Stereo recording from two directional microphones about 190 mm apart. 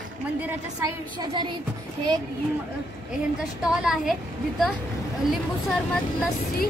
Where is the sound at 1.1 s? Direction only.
25° right (ahead or behind).